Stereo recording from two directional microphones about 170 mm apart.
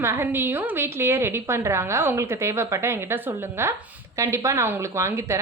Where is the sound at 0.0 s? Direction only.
15° right (ahead or behind).